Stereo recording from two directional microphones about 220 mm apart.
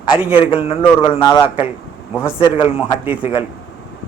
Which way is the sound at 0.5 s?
25° left (ahead or behind).